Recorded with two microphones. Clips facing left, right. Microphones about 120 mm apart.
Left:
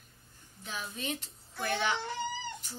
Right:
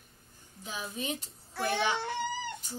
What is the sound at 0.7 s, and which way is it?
A child's voice, 15° right (ahead or behind).